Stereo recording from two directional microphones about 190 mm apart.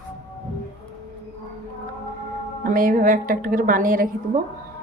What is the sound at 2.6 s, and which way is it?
A woman's voice, 45° right (ahead or behind).